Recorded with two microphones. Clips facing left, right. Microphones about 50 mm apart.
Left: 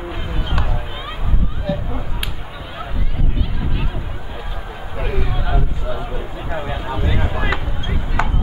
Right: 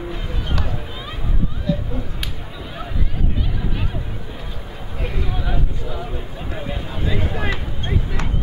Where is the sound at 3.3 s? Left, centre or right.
Centre.